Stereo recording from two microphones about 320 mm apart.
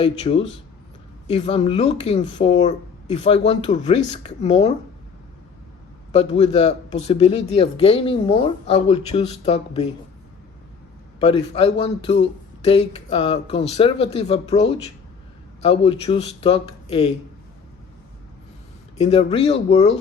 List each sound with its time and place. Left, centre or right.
0.3 s speech: centre
6.1 s speech: centre
11.2 s speech: centre
18.9 s speech: centre